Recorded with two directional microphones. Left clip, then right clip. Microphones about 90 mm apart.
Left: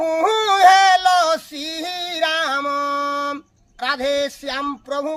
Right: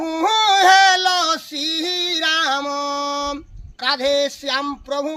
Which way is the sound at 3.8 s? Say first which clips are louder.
Right 2 dB; 45° left (ahead or behind).